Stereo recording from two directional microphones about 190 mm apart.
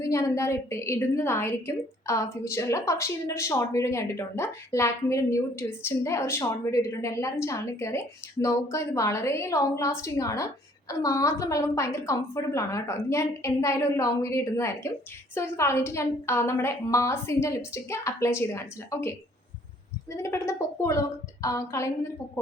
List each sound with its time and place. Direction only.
0.0 s a woman's voice: 15° left (ahead or behind)
20.2 s a woman's voice: 15° left (ahead or behind)